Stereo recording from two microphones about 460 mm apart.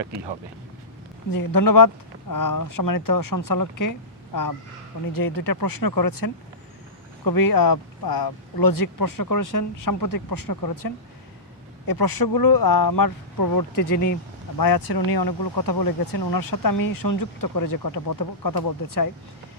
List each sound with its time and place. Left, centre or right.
1.3 s speech: left
14.6 s speech: left